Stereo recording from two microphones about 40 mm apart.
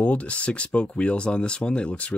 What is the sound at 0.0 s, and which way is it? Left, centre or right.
Speech, left.